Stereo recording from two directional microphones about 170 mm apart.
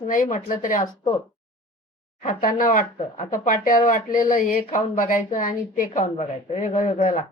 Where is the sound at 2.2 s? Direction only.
50° left (ahead or behind).